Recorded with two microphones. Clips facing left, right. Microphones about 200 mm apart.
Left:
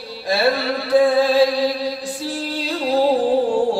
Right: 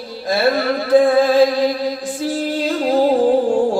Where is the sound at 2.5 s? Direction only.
50° right (ahead or behind).